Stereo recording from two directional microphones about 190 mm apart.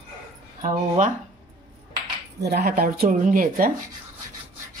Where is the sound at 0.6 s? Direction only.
40° right (ahead or behind).